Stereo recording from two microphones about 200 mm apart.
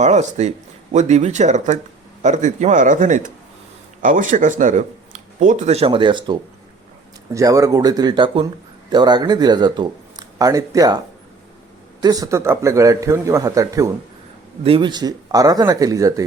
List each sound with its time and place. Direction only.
0.0 s speech: 35° right (ahead or behind)
7.3 s speech: 15° right (ahead or behind)